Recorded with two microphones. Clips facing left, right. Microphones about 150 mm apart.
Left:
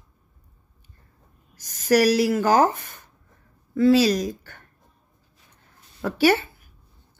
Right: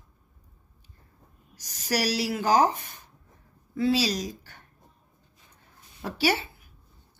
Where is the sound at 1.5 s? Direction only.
50° left (ahead or behind).